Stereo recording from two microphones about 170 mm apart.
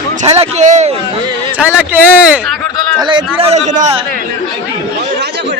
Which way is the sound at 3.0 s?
30° right (ahead or behind).